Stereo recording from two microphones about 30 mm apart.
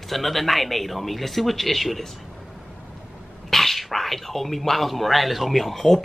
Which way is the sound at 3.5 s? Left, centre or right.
Centre.